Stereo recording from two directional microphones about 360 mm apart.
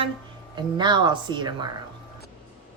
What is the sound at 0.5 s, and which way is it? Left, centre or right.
Speech, centre.